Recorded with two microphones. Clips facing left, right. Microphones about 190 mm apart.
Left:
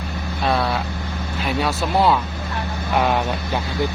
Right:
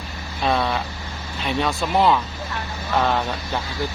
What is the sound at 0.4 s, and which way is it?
Vehicle, centre (ahead or behind).